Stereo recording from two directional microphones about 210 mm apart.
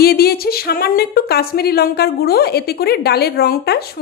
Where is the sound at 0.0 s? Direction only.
45° left (ahead or behind).